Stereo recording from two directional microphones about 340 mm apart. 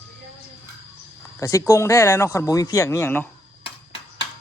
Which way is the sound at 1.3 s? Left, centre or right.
Centre.